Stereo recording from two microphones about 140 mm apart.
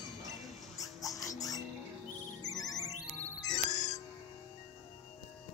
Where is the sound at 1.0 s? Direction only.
25° left (ahead or behind).